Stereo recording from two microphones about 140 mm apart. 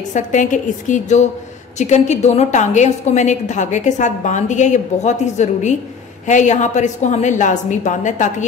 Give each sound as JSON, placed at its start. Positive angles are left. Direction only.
{"t": 0.1, "sound": "a woman's voice", "side_deg": 60}